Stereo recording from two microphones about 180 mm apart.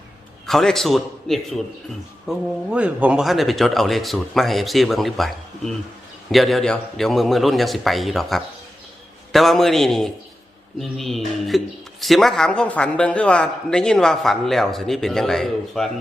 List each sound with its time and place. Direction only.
0.4 s a man's voice: centre (ahead or behind)